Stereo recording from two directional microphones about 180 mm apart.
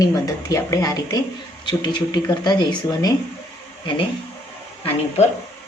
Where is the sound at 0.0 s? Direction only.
20° left (ahead or behind).